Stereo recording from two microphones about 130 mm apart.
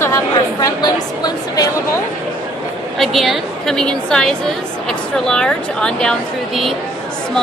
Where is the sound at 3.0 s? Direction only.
Centre (ahead or behind).